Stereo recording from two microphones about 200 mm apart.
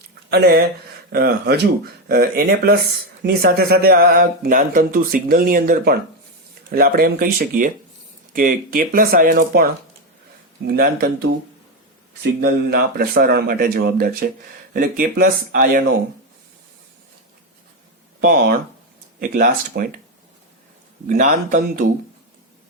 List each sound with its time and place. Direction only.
0.3 s speech: 55° right (ahead or behind)
10.7 s speech: 50° right (ahead or behind)
18.3 s speech: 45° right (ahead or behind)
21.1 s speech: 40° right (ahead or behind)